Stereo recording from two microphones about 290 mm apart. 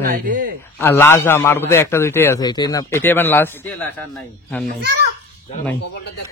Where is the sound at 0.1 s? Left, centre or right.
Right.